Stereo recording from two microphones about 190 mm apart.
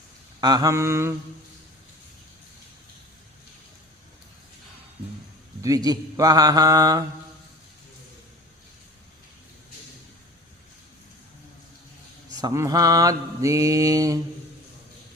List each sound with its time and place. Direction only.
0.4 s mantra: 20° right (ahead or behind)
5.6 s mantra: 20° right (ahead or behind)
12.4 s mantra: 20° right (ahead or behind)